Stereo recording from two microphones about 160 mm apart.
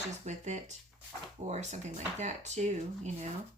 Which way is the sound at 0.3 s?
45° right (ahead or behind).